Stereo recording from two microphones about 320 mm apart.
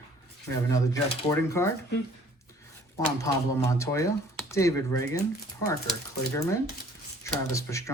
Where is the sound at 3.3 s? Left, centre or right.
Centre.